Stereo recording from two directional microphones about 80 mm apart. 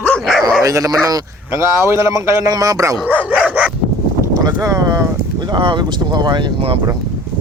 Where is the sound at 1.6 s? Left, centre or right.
Right.